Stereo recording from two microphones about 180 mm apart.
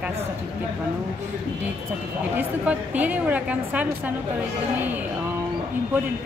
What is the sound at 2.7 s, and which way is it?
A woman's voice, 10° right (ahead or behind).